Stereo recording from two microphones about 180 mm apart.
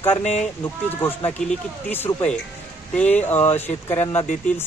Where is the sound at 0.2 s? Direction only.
40° left (ahead or behind).